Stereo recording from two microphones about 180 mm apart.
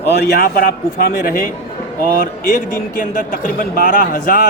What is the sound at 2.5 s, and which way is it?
A man's voice, 50° left (ahead or behind).